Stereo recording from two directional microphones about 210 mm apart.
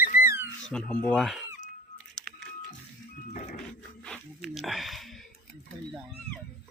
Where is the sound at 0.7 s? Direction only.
5° left (ahead or behind).